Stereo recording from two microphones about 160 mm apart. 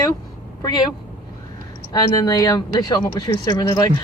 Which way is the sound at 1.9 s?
25° left (ahead or behind).